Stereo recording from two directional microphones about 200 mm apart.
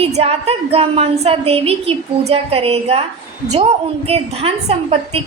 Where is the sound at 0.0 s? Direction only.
30° right (ahead or behind).